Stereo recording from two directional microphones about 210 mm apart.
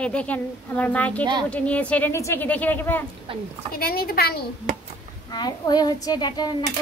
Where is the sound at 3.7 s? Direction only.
45° left (ahead or behind).